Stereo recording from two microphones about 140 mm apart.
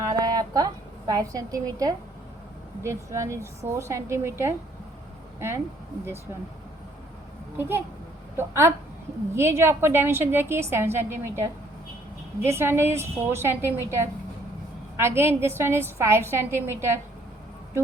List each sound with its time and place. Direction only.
0.0 s a woman's voice: 25° right (ahead or behind)
7.5 s a child's voice: 15° right (ahead or behind)